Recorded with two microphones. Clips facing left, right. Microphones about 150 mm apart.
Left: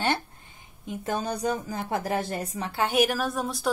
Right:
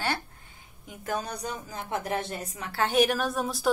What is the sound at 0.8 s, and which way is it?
A woman's voice, 25° left (ahead or behind).